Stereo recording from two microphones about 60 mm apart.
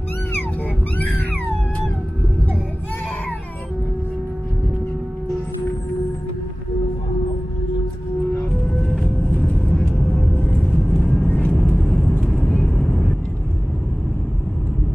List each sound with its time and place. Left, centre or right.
8.6 s vehicle: centre
9.3 s vehicle: left
10.7 s vehicle: centre
11.2 s vehicle: left
11.7 s vehicle: centre